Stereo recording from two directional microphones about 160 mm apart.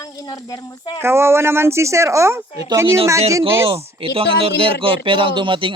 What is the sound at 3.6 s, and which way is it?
Speech, 35° right (ahead or behind).